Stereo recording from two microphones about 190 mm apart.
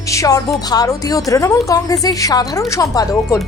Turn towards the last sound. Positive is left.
turn(degrees=15)  # may be behind; listen again after turning